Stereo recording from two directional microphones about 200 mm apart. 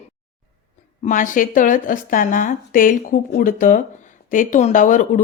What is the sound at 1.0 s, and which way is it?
Speech, 40° left (ahead or behind).